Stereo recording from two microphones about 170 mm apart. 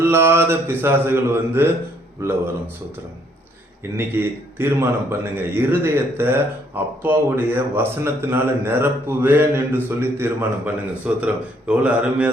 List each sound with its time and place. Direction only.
0.0 s a man's voice: 15° right (ahead or behind)
3.9 s a man's voice: 15° right (ahead or behind)